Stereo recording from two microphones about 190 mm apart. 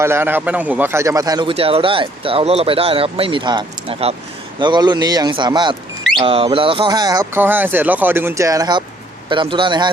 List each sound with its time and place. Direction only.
0.0 s speech: 10° right (ahead or behind)